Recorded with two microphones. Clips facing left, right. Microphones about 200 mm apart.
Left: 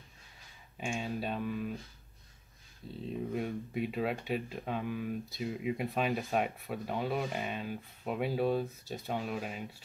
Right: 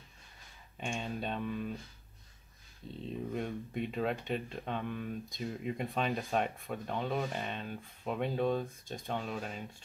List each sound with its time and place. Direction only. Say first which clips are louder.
0.7 s speech: left 2 dB; 5° left (ahead or behind)
3.3 s speech: left 2 dB; 5° left (ahead or behind)